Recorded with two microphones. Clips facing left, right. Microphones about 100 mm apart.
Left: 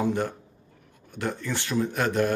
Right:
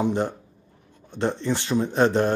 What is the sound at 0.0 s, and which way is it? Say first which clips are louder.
Speech: right 2 dB; 20° right (ahead or behind).